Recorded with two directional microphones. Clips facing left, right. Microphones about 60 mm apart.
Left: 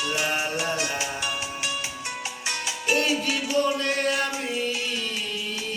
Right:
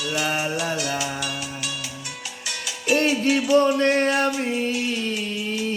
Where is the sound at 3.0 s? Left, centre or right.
Right.